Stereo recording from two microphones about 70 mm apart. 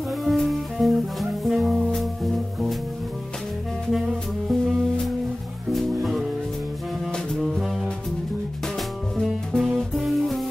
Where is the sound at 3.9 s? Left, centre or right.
Centre.